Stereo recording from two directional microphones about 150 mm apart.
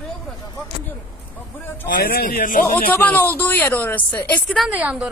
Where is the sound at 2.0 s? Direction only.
80° left.